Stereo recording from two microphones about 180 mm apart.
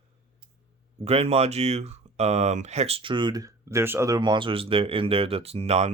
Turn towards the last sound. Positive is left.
turn(degrees=-35)  # may be behind; listen again after turning